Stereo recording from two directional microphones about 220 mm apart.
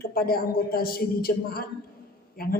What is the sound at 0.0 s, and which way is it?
A man's voice, 40° left (ahead or behind).